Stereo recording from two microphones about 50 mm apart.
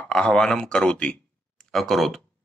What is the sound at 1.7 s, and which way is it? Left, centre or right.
Speech, centre.